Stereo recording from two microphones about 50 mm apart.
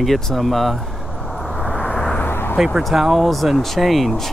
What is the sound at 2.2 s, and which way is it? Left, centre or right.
Vehicle, left.